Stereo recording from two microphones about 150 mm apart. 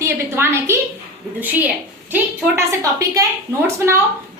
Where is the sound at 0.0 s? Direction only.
15° right (ahead or behind).